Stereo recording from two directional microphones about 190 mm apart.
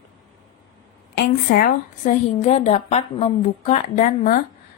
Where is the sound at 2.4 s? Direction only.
35° left (ahead or behind).